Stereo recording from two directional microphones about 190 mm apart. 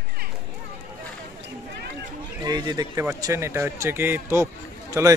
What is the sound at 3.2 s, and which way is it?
A man's voice, 15° right (ahead or behind).